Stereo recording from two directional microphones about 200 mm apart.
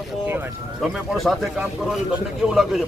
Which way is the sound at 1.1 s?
Centre (ahead or behind).